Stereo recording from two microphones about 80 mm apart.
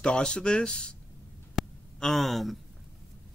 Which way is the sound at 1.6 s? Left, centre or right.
Centre.